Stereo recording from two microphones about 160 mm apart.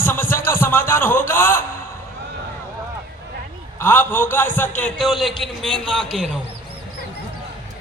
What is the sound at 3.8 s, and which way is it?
Speech, 15° left (ahead or behind).